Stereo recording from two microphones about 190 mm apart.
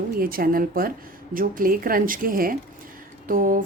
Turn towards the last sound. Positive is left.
turn(degrees=-45)  # may be behind; listen again after turning